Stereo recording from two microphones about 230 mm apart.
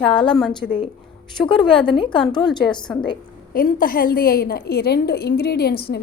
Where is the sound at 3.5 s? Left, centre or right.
Left.